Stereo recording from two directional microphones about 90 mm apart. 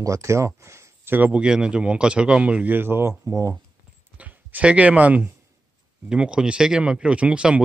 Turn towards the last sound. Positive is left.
turn(degrees=-10)  # may be behind; listen again after turning